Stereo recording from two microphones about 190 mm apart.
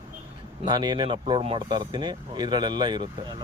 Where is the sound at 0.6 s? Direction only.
25° right (ahead or behind).